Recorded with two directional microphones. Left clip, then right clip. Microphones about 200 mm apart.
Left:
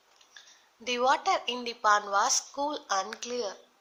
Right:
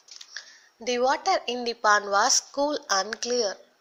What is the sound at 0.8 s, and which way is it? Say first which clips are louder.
A woman's voice: right 2 dB; 10° right (ahead or behind).